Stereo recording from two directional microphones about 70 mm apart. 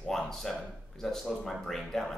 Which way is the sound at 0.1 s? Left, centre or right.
Centre.